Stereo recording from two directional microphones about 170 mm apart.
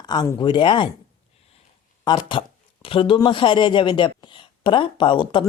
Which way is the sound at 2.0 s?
25° left (ahead or behind).